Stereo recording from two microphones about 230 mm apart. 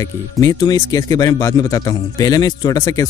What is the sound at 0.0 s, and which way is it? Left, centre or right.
Speech, centre.